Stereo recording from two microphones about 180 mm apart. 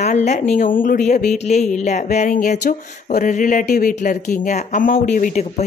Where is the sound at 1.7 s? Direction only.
40° left (ahead or behind).